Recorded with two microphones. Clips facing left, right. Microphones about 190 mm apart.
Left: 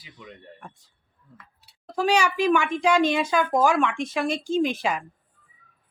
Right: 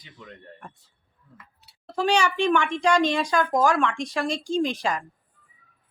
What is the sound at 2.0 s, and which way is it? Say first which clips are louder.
Speech: even; 10° left (ahead or behind).